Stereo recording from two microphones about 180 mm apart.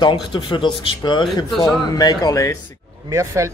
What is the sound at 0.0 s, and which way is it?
Speech, 25° left (ahead or behind).